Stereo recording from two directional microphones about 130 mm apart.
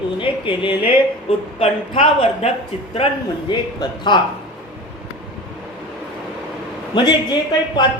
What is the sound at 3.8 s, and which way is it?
Speech, 35° left (ahead or behind).